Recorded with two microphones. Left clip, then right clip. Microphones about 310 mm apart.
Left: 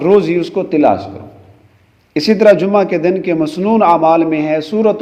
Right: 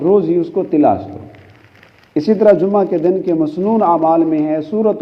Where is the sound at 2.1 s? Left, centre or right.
Left.